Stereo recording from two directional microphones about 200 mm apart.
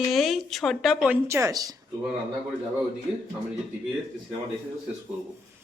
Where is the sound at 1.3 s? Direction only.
15° right (ahead or behind).